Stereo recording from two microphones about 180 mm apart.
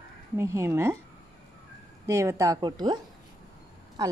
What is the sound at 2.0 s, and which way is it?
Speech, 15° right (ahead or behind).